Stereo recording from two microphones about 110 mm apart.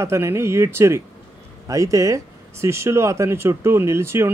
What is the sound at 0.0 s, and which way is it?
Speech, 25° right (ahead or behind).